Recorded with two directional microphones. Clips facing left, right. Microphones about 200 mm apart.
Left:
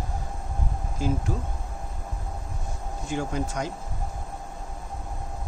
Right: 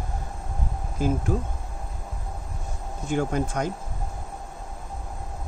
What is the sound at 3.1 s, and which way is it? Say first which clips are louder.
Speech: right 4 dB; 55° right (ahead or behind).